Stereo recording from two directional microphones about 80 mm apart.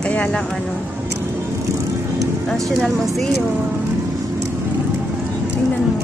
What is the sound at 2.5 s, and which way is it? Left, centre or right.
Speech, centre.